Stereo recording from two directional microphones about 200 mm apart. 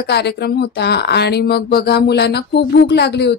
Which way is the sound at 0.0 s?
55° left (ahead or behind).